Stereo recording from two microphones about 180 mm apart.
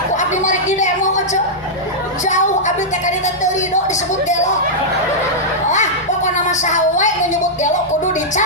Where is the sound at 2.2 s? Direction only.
40° left (ahead or behind).